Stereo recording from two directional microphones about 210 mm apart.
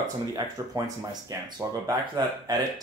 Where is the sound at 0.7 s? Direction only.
15° right (ahead or behind).